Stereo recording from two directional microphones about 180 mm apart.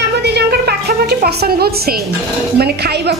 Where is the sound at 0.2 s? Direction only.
65° right (ahead or behind).